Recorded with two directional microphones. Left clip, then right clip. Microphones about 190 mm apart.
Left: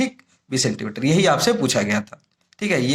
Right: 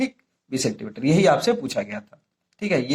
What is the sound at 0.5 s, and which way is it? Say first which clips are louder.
Speech: left 3 dB; 30° left (ahead or behind).